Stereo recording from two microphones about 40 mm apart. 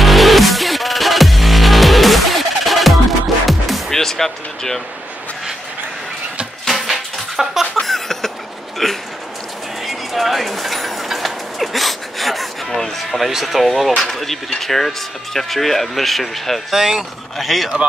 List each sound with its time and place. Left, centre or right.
0.0 s music: centre
3.9 s basketball bounce: centre
6.7 s a sound: centre
7.8 s a sound: centre
8.8 s speech: centre
9.8 s bird: centre
13.3 s speech: centre
16.7 s speech: centre
17.4 s speech: centre